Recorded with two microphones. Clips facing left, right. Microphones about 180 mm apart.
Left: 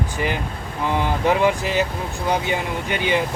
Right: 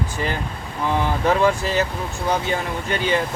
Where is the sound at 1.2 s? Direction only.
15° left (ahead or behind).